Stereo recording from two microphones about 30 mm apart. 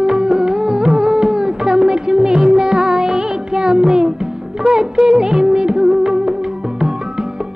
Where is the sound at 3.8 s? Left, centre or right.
Right.